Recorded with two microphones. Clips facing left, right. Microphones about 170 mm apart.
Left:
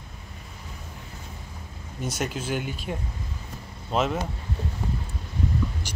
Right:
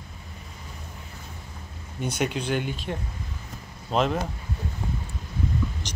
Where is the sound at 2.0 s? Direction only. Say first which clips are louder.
Right 3 dB; centre (ahead or behind).